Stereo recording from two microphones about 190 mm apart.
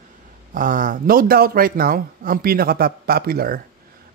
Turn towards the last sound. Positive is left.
turn(degrees=-50)  # may be behind; listen again after turning